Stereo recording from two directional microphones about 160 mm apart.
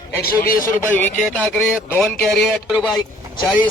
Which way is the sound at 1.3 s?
10° left (ahead or behind).